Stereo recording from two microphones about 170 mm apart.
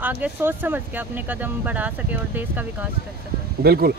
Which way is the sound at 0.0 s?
10° right (ahead or behind).